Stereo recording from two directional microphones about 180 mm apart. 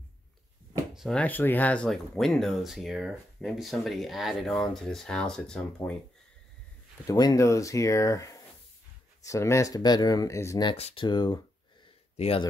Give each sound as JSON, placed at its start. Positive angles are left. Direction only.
{"t": 0.9, "sound": "speech", "side_deg": 5}
{"t": 7.1, "sound": "speech", "side_deg": 20}
{"t": 10.7, "sound": "speech", "side_deg": 30}